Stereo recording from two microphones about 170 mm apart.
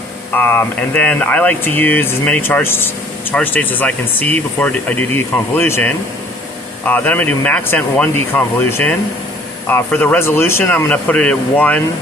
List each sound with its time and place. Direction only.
0.3 s speech: 10° left (ahead or behind)